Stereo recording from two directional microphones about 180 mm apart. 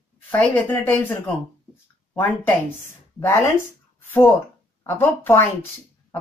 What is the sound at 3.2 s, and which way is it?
Speech, 15° left (ahead or behind).